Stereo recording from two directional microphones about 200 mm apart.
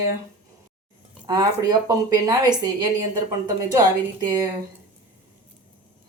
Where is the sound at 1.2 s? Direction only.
20° right (ahead or behind).